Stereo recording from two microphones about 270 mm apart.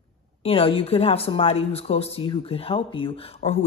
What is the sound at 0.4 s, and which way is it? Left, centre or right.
A woman's voice, left.